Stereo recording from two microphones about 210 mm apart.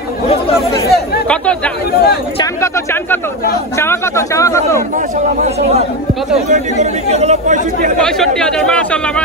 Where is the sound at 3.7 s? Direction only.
10° left (ahead or behind).